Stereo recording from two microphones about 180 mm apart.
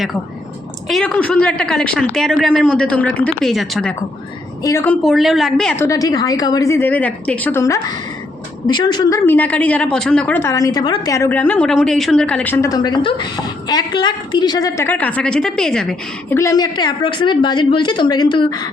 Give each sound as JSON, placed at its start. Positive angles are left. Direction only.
{"t": 0.9, "sound": "a woman's voice", "side_deg": 0}
{"t": 4.6, "sound": "a woman's voice", "side_deg": 15}
{"t": 5.0, "sound": "a woman's voice", "side_deg": 0}
{"t": 5.8, "sound": "a woman's voice", "side_deg": 20}
{"t": 16.4, "sound": "a woman's voice", "side_deg": 20}